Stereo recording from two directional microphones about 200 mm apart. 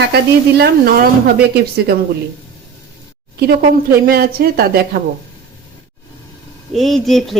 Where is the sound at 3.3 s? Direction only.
50° right (ahead or behind).